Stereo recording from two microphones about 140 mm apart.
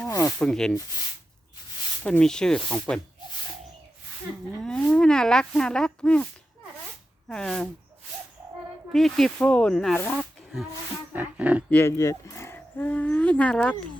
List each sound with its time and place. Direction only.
0.1 s rub: 20° left (ahead or behind)
0.3 s speech: 5° left (ahead or behind)
2.0 s speech: 5° left (ahead or behind)
4.6 s speech: 5° left (ahead or behind)
7.3 s speech: 5° left (ahead or behind)
8.9 s speech: 5° left (ahead or behind)
10.2 s snake: centre (ahead or behind)
11.1 s a sound: 10° right (ahead or behind)
11.7 s speech: 15° left (ahead or behind)